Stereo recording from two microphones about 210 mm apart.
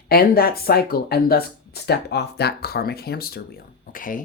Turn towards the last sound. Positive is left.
turn(degrees=40)  # may be behind; listen again after turning